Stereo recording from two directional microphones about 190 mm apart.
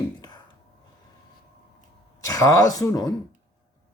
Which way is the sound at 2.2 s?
15° left (ahead or behind).